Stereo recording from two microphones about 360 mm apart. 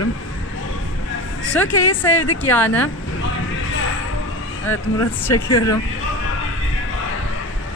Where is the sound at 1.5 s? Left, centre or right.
Centre.